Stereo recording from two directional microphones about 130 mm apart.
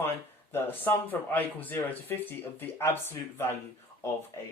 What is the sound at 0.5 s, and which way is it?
Speech, 15° left (ahead or behind).